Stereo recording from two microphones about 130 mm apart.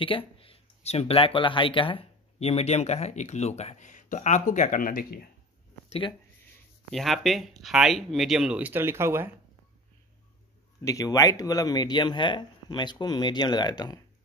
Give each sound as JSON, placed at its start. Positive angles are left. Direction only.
{"t": 0.0, "sound": "speech", "side_deg": 45}
{"t": 5.9, "sound": "speech", "side_deg": 40}
{"t": 6.9, "sound": "speech", "side_deg": 0}
{"t": 10.8, "sound": "speech", "side_deg": 25}